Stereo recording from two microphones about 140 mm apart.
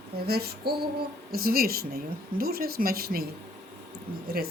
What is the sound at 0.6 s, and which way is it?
Speech, 90° right.